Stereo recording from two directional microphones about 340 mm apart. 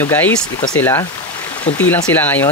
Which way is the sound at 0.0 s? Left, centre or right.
Centre.